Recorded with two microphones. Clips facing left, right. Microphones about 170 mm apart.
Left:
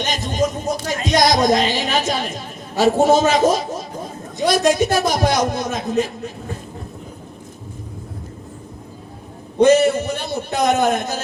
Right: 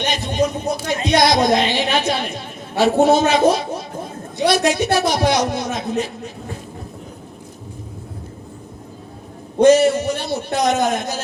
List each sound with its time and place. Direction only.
0.1 s a man's voice: 45° left (ahead or behind)
9.6 s a man's voice: 55° left (ahead or behind)